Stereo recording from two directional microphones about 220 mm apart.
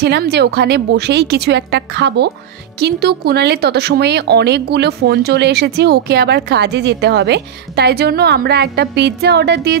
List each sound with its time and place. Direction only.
0.0 s speech: 50° right (ahead or behind)